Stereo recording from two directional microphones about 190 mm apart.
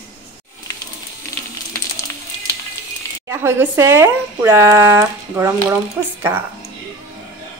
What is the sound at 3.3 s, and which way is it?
A woman's voice, 15° right (ahead or behind).